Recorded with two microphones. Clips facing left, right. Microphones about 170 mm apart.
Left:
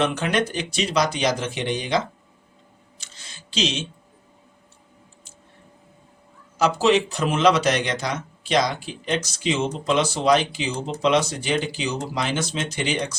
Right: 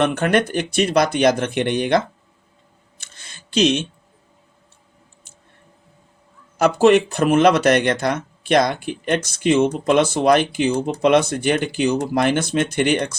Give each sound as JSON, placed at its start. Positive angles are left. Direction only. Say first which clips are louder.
{"t": 0.0, "sound": "speech", "louder": "right 5 dB", "side_deg": -55}
{"t": 3.0, "sound": "a sound", "louder": "right 1 dB", "side_deg": -55}
{"t": 6.6, "sound": "speech", "louder": "right 5 dB", "side_deg": -55}